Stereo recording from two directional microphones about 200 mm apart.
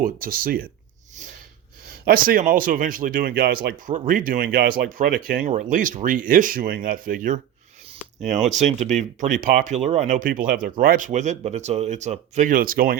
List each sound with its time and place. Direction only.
0.0 s speech: 45° right (ahead or behind)
2.0 s speech: 45° right (ahead or behind)
8.4 s speech: 35° right (ahead or behind)